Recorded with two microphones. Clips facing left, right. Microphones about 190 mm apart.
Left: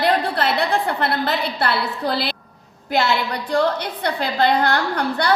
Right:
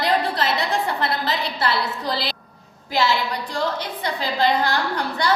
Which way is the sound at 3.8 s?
60° left (ahead or behind).